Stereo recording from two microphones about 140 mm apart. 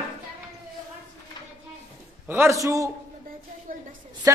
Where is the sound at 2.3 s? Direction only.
20° right (ahead or behind).